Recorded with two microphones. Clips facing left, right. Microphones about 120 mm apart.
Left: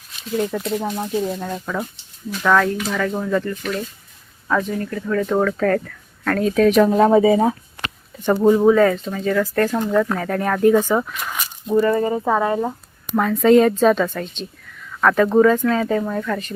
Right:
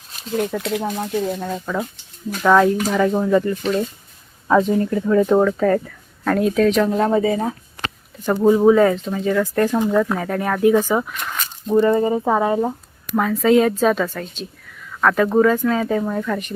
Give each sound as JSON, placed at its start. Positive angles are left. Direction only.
{"t": 0.7, "sound": "a woman's voice", "side_deg": 0}
{"t": 3.6, "sound": "a woman's voice", "side_deg": -25}
{"t": 8.4, "sound": "speech", "side_deg": -10}
{"t": 11.1, "sound": "a sound", "side_deg": 10}
{"t": 11.7, "sound": "speech", "side_deg": -20}
{"t": 13.1, "sound": "a woman's voice", "side_deg": 0}